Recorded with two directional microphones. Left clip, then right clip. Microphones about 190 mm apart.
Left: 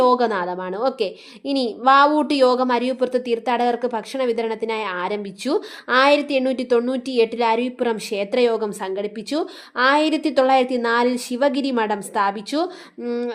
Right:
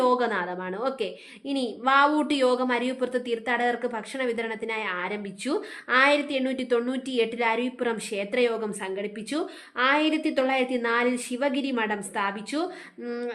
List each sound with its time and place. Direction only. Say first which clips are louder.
0.0 s a woman's voice: left 6 dB; 30° left (ahead or behind)